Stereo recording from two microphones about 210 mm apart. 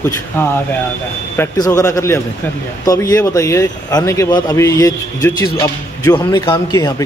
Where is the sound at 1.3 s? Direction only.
10° left (ahead or behind).